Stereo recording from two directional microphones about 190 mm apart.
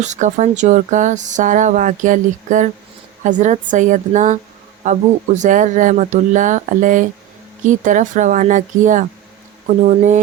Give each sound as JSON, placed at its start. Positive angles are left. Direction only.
{"t": 0.0, "sound": "speech", "side_deg": -40}